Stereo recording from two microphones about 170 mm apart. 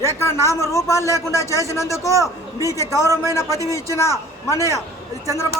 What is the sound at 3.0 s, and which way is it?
Speech, 20° right (ahead or behind).